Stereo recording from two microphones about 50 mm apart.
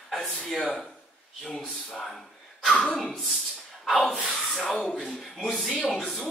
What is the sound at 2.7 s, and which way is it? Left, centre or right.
Speech, centre.